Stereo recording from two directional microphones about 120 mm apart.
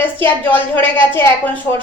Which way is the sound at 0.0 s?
15° left (ahead or behind).